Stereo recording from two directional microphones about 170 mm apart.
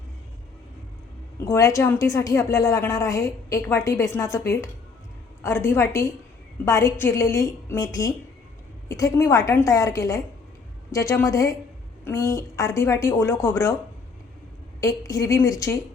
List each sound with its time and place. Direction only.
1.5 s a woman's voice: 20° left (ahead or behind)
14.8 s a woman's voice: 20° left (ahead or behind)